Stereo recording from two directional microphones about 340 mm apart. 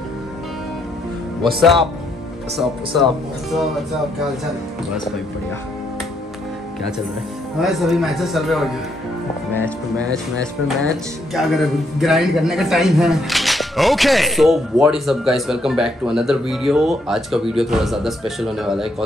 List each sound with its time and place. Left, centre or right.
1.4 s speech: centre
7.6 s speech: centre